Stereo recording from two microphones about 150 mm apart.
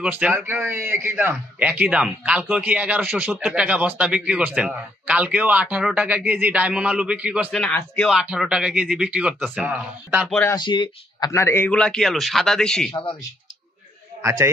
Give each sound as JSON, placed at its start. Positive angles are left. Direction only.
{"t": 0.0, "sound": "a man's voice", "side_deg": -10}
{"t": 7.5, "sound": "speech", "side_deg": 10}
{"t": 10.5, "sound": "a man's voice", "side_deg": 30}
{"t": 12.9, "sound": "speech", "side_deg": 35}